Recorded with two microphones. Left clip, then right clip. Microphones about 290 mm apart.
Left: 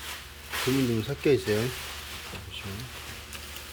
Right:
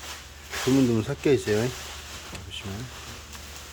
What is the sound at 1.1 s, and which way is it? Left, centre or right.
Speech, centre.